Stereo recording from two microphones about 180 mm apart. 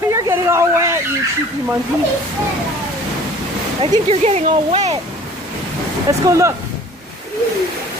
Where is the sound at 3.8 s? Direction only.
35° right (ahead or behind).